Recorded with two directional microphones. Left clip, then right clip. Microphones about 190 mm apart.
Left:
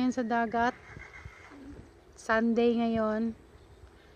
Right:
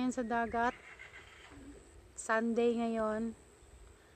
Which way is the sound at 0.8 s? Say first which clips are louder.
Left 4 dB; 55° right (ahead or behind).